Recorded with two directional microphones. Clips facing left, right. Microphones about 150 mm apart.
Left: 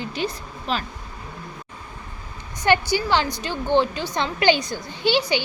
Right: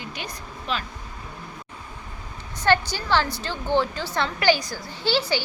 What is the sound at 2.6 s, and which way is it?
A woman's voice, 15° left (ahead or behind).